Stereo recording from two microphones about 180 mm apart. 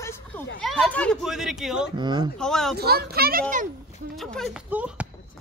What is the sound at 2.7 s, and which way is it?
Speech, 60° right (ahead or behind).